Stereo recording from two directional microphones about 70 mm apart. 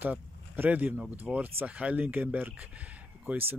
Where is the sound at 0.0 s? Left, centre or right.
Right.